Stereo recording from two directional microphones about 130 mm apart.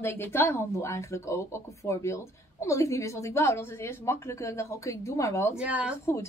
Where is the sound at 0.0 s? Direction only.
20° left (ahead or behind).